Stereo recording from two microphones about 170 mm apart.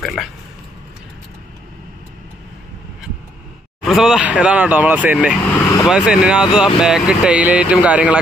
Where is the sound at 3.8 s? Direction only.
5° right (ahead or behind).